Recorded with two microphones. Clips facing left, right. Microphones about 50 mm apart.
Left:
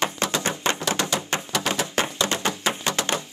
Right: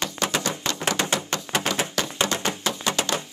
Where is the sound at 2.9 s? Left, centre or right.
Left.